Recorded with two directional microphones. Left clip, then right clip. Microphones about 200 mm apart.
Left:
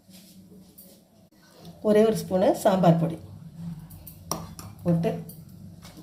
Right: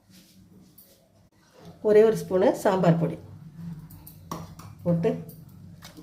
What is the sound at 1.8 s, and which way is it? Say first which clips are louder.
Speech: right 2 dB; 15° right (ahead or behind).